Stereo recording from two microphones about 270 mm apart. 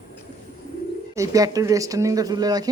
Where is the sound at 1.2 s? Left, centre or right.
Centre.